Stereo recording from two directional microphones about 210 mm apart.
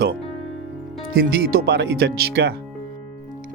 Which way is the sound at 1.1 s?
45° right (ahead or behind).